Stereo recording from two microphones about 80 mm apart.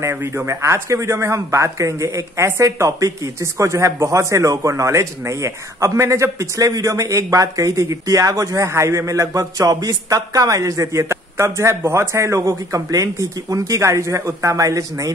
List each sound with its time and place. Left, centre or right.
0.0 s speech: right